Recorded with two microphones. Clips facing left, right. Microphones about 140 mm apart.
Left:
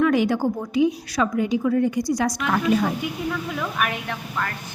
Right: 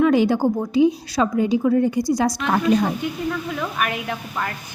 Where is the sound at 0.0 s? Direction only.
30° right (ahead or behind).